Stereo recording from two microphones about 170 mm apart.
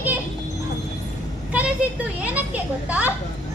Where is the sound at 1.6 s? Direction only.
10° right (ahead or behind).